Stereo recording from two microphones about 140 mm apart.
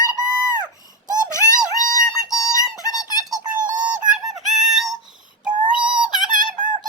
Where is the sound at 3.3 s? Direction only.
65° right (ahead or behind).